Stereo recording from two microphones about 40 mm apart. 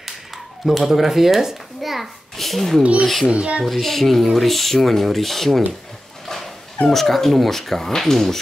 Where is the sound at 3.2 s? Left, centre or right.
Right.